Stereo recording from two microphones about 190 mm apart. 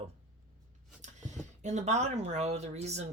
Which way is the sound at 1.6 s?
35° right (ahead or behind).